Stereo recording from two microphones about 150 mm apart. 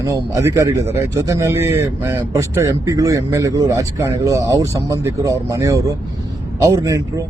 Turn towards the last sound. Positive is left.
turn(degrees=-20)  # may be behind; listen again after turning